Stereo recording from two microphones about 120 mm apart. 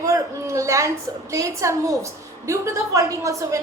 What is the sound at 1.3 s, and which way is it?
A woman's voice, 25° right (ahead or behind).